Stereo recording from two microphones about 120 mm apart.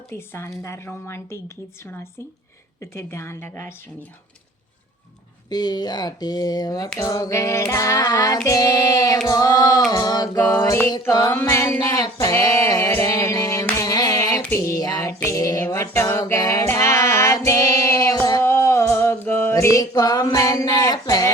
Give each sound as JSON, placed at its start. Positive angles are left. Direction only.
{"t": 0.1, "sound": "female singing", "side_deg": 20}
{"t": 2.8, "sound": "female singing", "side_deg": 25}
{"t": 5.5, "sound": "speech", "side_deg": 35}
{"t": 7.0, "sound": "female singing", "side_deg": 30}
{"t": 8.4, "sound": "speech", "side_deg": 30}
{"t": 11.3, "sound": "female singing", "side_deg": 20}
{"t": 12.3, "sound": "speech", "side_deg": 30}
{"t": 13.1, "sound": "a sound", "side_deg": 30}
{"t": 13.9, "sound": "a sound", "side_deg": 35}
{"t": 14.6, "sound": "music", "side_deg": 30}
{"t": 18.4, "sound": "mantra", "side_deg": 20}